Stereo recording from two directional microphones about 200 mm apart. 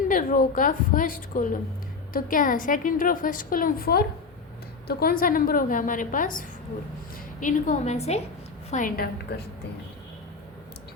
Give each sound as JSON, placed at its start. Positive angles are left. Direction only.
{"t": 0.1, "sound": "a woman's voice", "side_deg": 40}
{"t": 8.7, "sound": "a woman's voice", "side_deg": 45}